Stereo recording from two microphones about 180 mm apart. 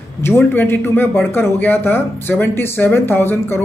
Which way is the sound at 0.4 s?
10° left (ahead or behind).